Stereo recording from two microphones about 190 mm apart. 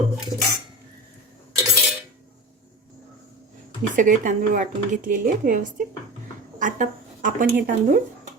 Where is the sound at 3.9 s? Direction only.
45° right (ahead or behind).